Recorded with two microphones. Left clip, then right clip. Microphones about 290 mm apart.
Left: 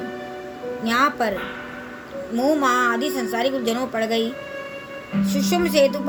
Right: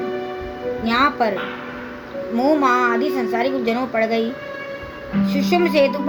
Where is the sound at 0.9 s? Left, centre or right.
Left.